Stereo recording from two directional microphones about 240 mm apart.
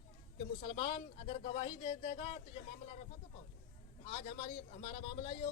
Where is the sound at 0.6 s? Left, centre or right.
Left.